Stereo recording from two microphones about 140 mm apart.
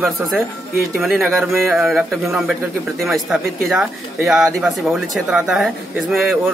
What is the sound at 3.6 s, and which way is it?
Speech, centre (ahead or behind).